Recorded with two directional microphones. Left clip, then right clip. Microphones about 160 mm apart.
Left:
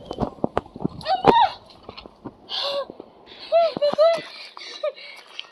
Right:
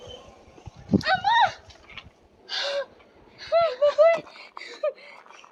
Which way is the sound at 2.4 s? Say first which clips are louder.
Left 2 dB; 10° right (ahead or behind).